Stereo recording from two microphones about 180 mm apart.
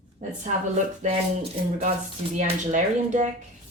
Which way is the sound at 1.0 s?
35° right (ahead or behind).